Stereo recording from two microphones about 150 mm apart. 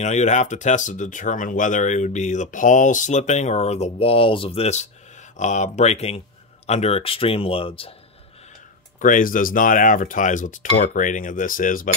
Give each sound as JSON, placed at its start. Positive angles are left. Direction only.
{"t": 0.0, "sound": "speech", "side_deg": 50}
{"t": 9.0, "sound": "speech", "side_deg": 65}